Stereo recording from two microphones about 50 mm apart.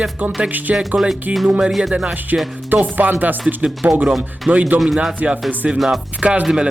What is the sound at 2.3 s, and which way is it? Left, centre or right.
Speech, right.